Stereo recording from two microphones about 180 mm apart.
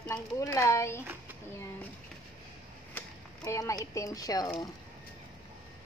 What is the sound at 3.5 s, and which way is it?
Speech, 15° left (ahead or behind).